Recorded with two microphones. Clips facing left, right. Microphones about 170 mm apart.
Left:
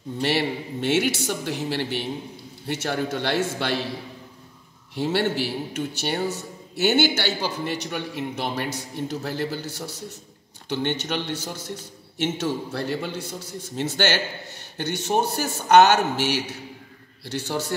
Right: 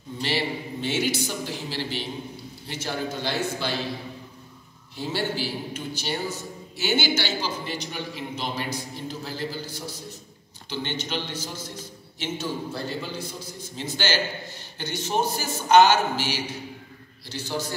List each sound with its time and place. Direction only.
0.2 s a woman's voice: 60° left (ahead or behind)
2.7 s a man's voice: 70° left (ahead or behind)
4.9 s a man's voice: 70° left (ahead or behind)